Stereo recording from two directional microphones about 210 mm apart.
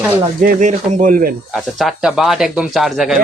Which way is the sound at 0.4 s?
40° right (ahead or behind).